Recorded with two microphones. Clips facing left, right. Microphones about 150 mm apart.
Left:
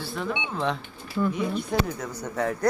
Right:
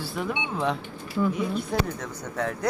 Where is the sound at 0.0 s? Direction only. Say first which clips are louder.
Even; 10° right (ahead or behind).